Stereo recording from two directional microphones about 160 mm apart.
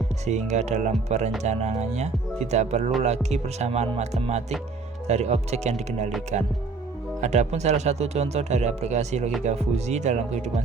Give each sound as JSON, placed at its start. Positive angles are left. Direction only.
{"t": 0.3, "sound": "speech", "side_deg": -45}